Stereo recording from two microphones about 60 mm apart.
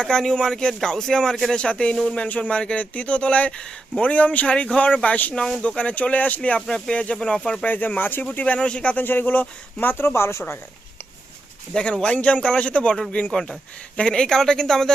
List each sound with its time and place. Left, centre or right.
0.0 s speech: centre
5.3 s speech: centre
6.7 s speech: centre
7.6 s speech: left
9.0 s speech: left
11.7 s speech: centre